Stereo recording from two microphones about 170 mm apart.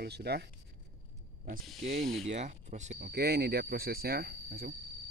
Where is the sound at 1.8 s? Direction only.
40° right (ahead or behind).